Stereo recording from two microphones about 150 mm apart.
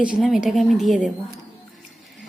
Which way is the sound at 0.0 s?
5° right (ahead or behind).